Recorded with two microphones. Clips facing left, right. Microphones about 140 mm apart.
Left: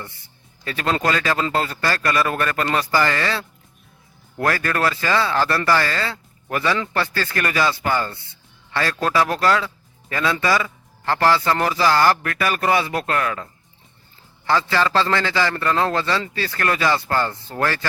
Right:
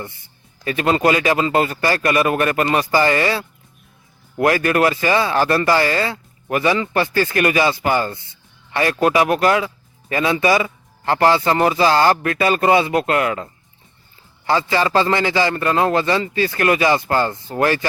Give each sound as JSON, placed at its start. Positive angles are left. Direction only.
{"t": 0.6, "sound": "a man's voice", "side_deg": -15}